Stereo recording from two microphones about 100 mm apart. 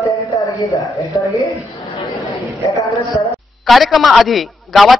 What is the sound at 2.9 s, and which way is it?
Speech, 30° left (ahead or behind).